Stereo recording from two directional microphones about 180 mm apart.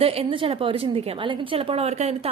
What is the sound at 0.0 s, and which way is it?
A woman's voice, 35° right (ahead or behind).